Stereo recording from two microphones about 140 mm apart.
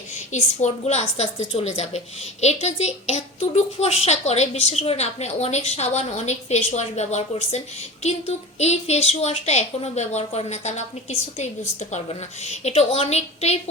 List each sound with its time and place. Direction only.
0.1 s a woman's voice: 55° left (ahead or behind)